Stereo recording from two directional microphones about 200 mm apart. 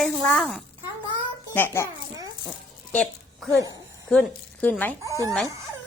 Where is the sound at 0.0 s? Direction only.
Centre (ahead or behind).